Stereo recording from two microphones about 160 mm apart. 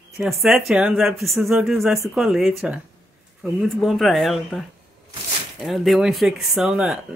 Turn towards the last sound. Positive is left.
turn(degrees=-5)  # may be behind; listen again after turning